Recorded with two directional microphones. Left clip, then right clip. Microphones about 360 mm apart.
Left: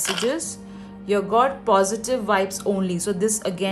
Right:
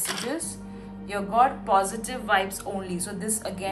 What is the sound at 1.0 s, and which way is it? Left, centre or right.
A woman's voice, centre.